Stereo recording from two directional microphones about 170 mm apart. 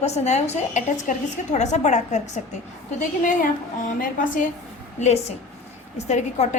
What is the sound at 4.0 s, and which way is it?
Speech, 50° left (ahead or behind).